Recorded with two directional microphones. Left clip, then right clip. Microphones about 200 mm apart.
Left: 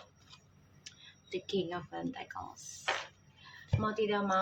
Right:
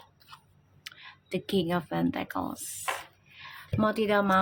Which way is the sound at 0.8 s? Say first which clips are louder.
Right 8 dB; 45° right (ahead or behind).